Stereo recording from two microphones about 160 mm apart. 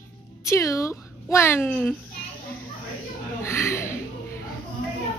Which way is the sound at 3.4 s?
15° left (ahead or behind).